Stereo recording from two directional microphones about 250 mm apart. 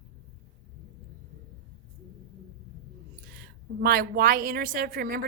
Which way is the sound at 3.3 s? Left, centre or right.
Right.